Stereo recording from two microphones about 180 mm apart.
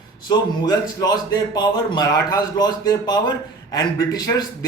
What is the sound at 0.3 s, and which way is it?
A man's voice, 20° left (ahead or behind).